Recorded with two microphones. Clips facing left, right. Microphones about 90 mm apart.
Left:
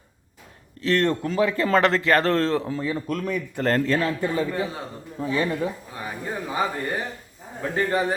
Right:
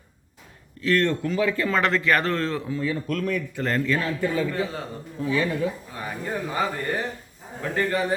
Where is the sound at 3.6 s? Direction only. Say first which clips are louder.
Left 5 dB; 45° left (ahead or behind).